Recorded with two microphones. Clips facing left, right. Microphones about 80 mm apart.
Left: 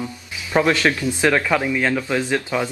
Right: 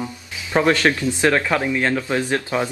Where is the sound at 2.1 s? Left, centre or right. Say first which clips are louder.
Even; centre.